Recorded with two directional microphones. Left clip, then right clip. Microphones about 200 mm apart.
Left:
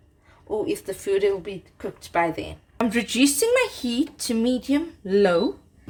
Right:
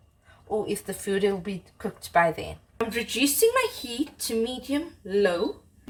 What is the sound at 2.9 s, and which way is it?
Speech, 55° left (ahead or behind).